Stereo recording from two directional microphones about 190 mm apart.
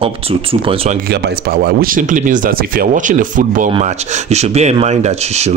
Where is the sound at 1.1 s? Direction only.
55° right (ahead or behind).